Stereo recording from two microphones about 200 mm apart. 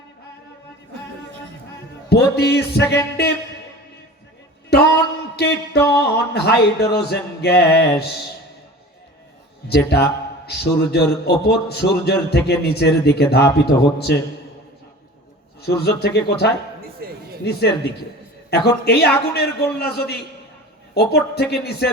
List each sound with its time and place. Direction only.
2.0 s a man's voice: 55° left (ahead or behind)
2.8 s music: 15° left (ahead or behind)
4.7 s speech: 55° left (ahead or behind)
5.4 s music: 55° left (ahead or behind)
6.0 s a man's voice: 55° left (ahead or behind)
9.6 s a man's voice: 55° left (ahead or behind)
14.1 s music: 55° left (ahead or behind)
15.6 s a man's voice: 55° left (ahead or behind)
17.0 s speech: 50° right (ahead or behind)
17.4 s music: 55° left (ahead or behind)
18.5 s a man's voice: 55° left (ahead or behind)